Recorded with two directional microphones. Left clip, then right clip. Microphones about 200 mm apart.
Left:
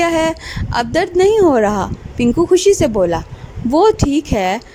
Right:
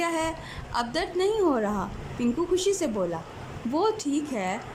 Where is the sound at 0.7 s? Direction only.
40° left (ahead or behind).